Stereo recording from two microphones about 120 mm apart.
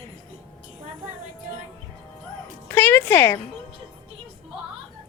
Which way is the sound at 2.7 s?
15° left (ahead or behind).